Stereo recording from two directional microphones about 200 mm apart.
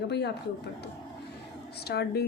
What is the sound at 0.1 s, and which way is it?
Speech, 55° left (ahead or behind).